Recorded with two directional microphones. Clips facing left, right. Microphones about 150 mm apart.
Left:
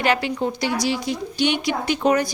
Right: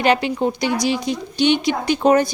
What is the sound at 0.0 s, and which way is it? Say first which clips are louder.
Speech: right 4 dB; 20° right (ahead or behind).